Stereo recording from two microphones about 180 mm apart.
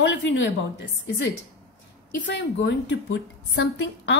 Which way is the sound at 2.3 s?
85° left.